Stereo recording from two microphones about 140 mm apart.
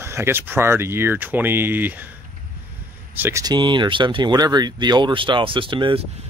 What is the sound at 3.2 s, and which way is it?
Speech, 20° right (ahead or behind).